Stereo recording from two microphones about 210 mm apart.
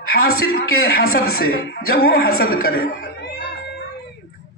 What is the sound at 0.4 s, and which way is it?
Speech, 45° left (ahead or behind).